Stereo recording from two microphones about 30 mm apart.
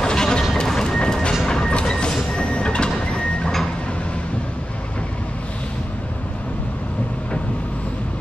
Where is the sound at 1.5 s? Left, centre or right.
Left.